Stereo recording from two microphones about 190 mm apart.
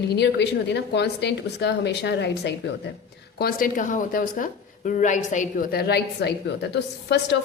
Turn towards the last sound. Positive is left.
turn(degrees=65)  # may be behind; listen again after turning